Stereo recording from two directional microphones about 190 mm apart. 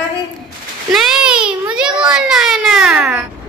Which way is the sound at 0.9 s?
Centre (ahead or behind).